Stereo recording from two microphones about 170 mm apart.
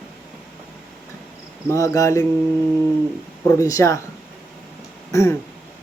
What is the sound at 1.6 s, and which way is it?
Cricket, 15° left (ahead or behind).